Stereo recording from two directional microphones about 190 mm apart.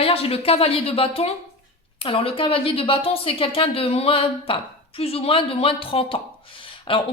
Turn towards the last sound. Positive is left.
turn(degrees=25)  # may be behind; listen again after turning